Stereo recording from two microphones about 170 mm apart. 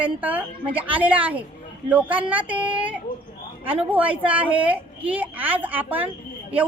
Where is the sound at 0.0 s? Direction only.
10° right (ahead or behind).